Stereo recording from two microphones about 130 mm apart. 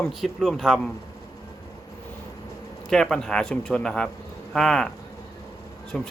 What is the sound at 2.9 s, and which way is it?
A man's voice, 5° left (ahead or behind).